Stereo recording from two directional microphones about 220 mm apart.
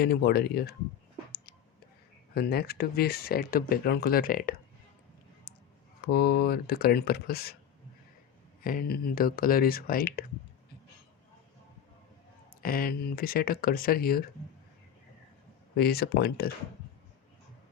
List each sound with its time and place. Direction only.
0.0 s speech: 45° left (ahead or behind)
2.3 s speech: 45° left (ahead or behind)
6.0 s speech: 45° left (ahead or behind)
8.6 s speech: 40° left (ahead or behind)
12.6 s speech: 40° left (ahead or behind)
15.7 s speech: 45° left (ahead or behind)